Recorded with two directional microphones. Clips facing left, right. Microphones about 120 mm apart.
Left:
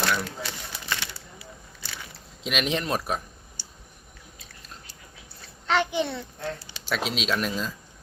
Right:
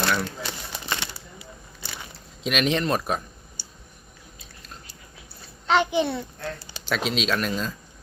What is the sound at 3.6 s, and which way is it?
Clicking, 15° right (ahead or behind).